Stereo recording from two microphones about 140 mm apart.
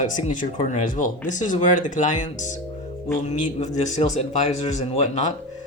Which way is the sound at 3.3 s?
55° left (ahead or behind).